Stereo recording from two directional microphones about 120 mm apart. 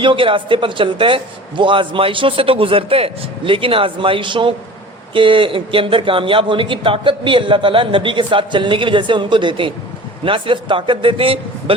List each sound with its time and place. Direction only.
0.0 s a man's voice: 45° right (ahead or behind)